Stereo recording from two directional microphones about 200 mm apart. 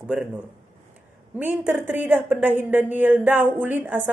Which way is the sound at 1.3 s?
10° right (ahead or behind).